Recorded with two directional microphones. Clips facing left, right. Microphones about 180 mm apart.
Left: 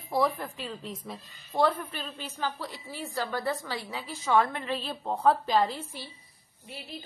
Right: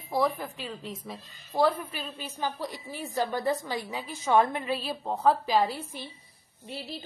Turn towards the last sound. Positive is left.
turn(degrees=-30)  # may be behind; listen again after turning